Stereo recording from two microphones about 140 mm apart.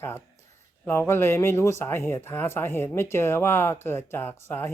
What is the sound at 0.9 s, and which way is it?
Speech, 15° left (ahead or behind).